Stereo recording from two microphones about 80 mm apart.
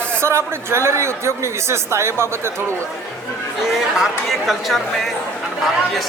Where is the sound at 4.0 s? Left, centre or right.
Centre.